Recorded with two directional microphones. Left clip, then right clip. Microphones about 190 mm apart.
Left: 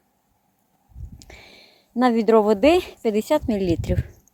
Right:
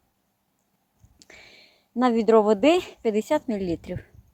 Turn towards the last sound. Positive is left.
turn(degrees=45)  # may be behind; listen again after turning